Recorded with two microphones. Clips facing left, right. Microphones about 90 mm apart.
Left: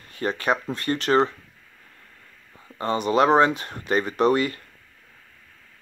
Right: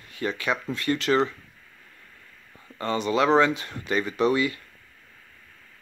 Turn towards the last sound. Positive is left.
turn(degrees=45)  # may be behind; listen again after turning